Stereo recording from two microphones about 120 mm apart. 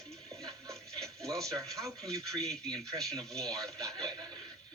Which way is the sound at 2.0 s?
5° left (ahead or behind).